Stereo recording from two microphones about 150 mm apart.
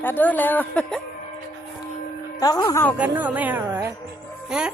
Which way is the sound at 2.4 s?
25° left (ahead or behind).